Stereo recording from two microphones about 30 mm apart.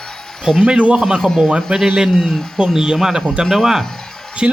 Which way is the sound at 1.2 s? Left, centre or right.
Centre.